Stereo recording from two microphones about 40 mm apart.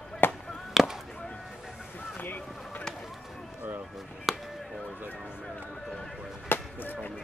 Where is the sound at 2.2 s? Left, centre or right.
Left.